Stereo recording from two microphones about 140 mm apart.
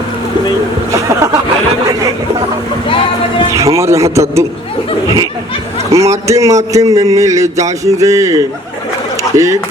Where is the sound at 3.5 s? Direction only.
20° right (ahead or behind).